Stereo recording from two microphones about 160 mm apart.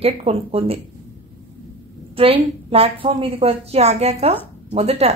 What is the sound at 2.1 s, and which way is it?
A woman's voice, 35° right (ahead or behind).